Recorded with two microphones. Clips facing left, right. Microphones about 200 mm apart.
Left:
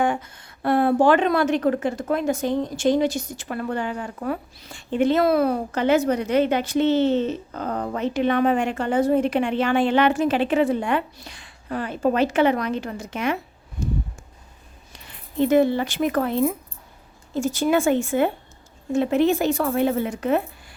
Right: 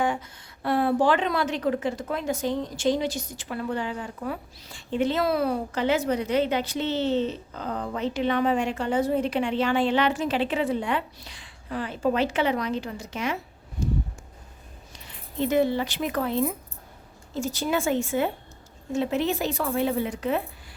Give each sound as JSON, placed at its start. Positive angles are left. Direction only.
{"t": 0.0, "sound": "a woman's voice", "side_deg": 55}
{"t": 15.4, "sound": "a woman's voice", "side_deg": 55}